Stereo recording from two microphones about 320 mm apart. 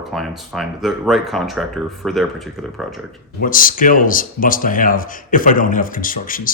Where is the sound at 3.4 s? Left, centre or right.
Left.